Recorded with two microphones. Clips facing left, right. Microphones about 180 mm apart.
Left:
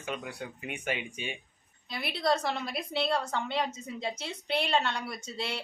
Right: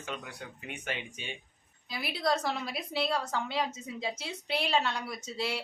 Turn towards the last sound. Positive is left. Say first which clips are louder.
# right 2 dB
turn(degrees=-5)  # may be behind; listen again after turning